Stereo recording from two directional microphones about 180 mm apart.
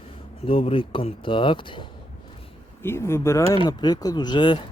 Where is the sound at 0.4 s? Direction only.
30° left (ahead or behind).